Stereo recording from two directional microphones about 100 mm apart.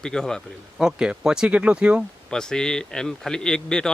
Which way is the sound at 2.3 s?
5° left (ahead or behind).